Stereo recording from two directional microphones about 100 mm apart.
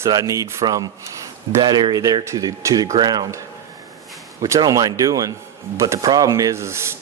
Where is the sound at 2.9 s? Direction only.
45° right (ahead or behind).